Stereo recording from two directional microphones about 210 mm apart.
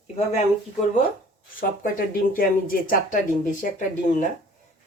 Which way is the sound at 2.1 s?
45° left (ahead or behind).